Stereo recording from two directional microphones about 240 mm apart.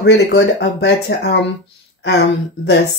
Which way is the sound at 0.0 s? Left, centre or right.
Left.